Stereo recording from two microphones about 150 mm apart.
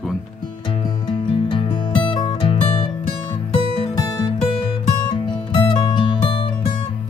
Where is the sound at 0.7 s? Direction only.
35° left (ahead or behind).